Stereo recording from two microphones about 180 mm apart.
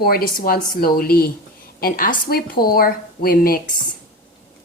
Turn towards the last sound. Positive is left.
turn(degrees=55)  # may be behind; listen again after turning